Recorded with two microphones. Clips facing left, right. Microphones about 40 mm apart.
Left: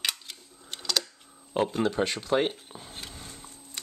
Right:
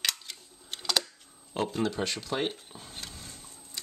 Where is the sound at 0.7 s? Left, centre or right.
Centre.